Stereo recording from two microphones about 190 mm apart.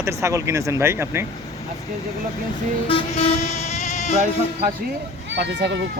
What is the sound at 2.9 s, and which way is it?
Vehicle, 30° left (ahead or behind).